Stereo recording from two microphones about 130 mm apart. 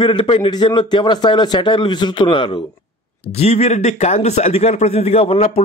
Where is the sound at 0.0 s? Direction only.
35° left (ahead or behind).